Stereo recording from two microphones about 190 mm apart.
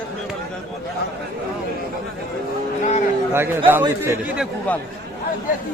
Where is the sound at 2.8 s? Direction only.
40° left (ahead or behind).